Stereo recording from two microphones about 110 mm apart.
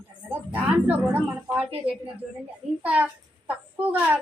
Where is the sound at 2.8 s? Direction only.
15° right (ahead or behind).